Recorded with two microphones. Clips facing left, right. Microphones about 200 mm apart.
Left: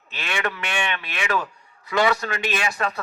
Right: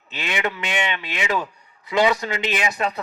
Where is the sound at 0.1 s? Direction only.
20° right (ahead or behind).